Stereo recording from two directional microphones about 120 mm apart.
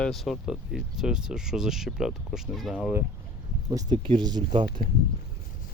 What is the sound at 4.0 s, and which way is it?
Speech, 50° right (ahead or behind).